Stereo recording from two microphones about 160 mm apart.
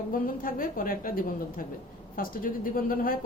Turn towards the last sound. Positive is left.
turn(degrees=65)  # may be behind; listen again after turning